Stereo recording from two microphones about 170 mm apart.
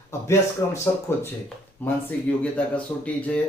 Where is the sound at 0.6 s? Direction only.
20° left (ahead or behind).